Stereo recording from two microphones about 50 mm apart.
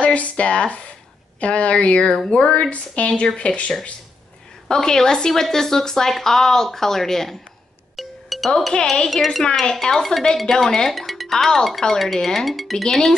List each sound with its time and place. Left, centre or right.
0.0 s speech: left
2.1 s speech: centre
2.7 s speech: left; by 7.3 s centre
7.9 s music: centre
9.1 s speech: centre